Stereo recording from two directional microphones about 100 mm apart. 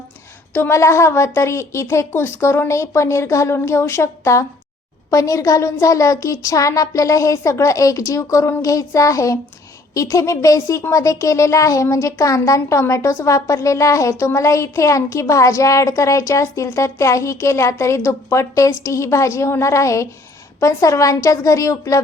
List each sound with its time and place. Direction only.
0.5 s a woman's voice: 25° left (ahead or behind)